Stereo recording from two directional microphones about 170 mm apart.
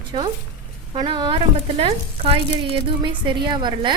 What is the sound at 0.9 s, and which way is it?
A woman's voice, 25° right (ahead or behind).